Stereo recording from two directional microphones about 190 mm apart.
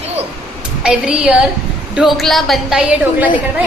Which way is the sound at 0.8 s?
5° right (ahead or behind).